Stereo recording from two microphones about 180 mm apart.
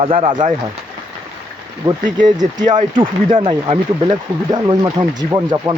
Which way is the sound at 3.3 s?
30° right (ahead or behind).